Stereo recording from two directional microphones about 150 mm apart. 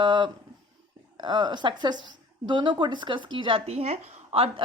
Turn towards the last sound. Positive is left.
turn(degrees=-40)  # may be behind; listen again after turning